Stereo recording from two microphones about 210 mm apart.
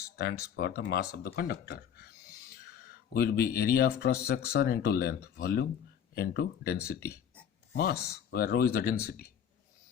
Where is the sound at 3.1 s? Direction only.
45° left (ahead or behind).